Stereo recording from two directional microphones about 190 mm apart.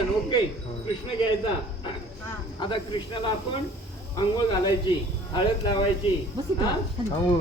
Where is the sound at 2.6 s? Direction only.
25° left (ahead or behind).